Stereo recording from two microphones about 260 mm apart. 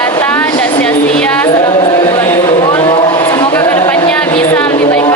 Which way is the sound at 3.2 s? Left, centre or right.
Centre.